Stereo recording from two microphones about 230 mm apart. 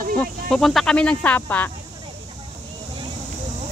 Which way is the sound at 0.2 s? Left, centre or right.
Centre.